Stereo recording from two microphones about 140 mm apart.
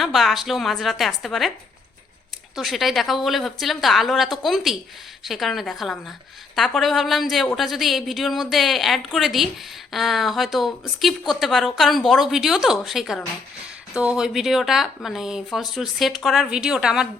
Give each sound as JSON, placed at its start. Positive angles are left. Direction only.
{"t": 0.0, "sound": "a woman's voice", "side_deg": 0}
{"t": 2.6, "sound": "a woman's voice", "side_deg": 0}